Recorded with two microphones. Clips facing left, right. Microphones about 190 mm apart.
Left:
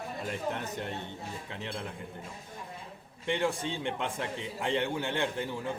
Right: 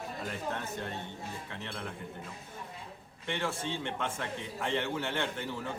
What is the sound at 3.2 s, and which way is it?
A man's voice, 15° left (ahead or behind).